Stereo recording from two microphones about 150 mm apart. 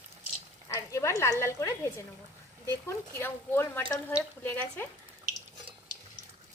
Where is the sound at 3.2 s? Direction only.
15° left (ahead or behind).